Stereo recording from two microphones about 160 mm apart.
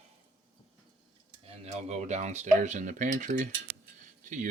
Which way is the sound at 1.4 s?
45° right (ahead or behind).